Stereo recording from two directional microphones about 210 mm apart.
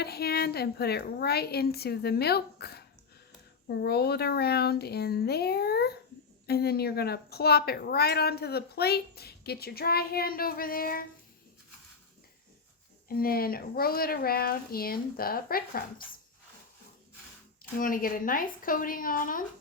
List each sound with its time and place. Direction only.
0.0 s a woman's voice: 50° left (ahead or behind)
13.1 s a woman's voice: 45° left (ahead or behind)
17.7 s speech: 40° left (ahead or behind)